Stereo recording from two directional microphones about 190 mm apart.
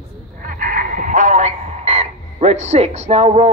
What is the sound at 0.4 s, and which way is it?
Radio, 45° right (ahead or behind).